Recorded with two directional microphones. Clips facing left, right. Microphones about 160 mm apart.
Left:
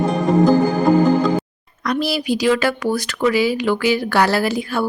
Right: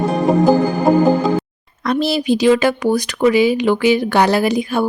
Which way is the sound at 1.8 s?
25° right (ahead or behind).